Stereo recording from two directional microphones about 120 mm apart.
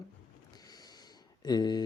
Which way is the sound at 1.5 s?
35° left (ahead or behind).